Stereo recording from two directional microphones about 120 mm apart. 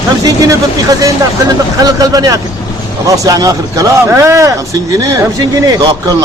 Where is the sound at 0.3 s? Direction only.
30° right (ahead or behind).